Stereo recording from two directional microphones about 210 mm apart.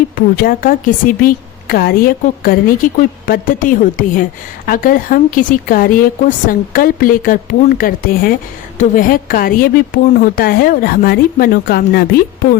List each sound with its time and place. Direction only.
0.3 s a woman's voice: 45° left (ahead or behind)